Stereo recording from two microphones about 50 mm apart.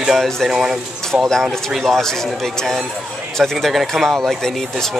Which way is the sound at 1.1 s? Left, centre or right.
Right.